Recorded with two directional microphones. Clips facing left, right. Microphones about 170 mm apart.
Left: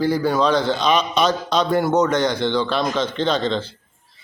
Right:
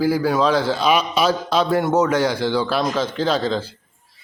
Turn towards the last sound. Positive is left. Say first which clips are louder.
# even
turn(degrees=-5)  # may be behind; listen again after turning